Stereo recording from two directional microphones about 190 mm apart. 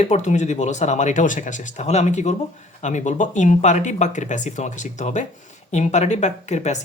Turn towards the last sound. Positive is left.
turn(degrees=35)  # may be behind; listen again after turning